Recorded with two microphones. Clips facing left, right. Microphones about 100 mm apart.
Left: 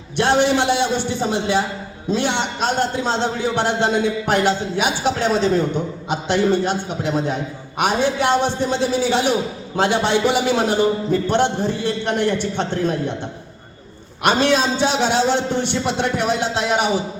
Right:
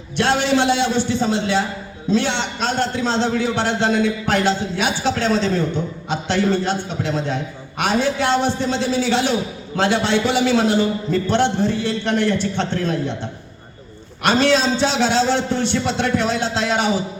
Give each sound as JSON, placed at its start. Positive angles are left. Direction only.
{"t": 0.2, "sound": "a man's voice", "side_deg": 15}
{"t": 14.3, "sound": "a man's voice", "side_deg": 15}